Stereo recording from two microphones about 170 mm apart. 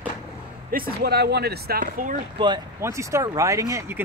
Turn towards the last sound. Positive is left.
turn(degrees=-15)  # may be behind; listen again after turning